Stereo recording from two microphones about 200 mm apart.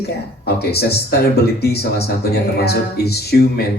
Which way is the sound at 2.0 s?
55° left (ahead or behind).